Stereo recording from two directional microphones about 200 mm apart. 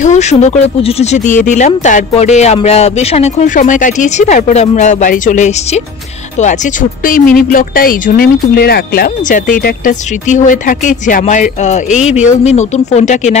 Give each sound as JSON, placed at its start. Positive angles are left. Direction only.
{"t": 0.0, "sound": "speech", "side_deg": 35}